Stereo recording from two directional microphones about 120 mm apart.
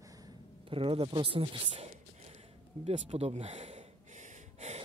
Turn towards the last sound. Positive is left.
turn(degrees=-70)  # may be behind; listen again after turning